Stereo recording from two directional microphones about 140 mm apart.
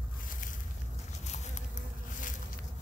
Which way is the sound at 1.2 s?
55° left (ahead or behind).